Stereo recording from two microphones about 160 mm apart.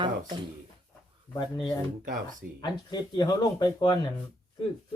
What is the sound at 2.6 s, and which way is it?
Speech, 25° left (ahead or behind).